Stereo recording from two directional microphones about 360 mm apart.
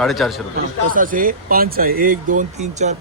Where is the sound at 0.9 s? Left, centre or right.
Right.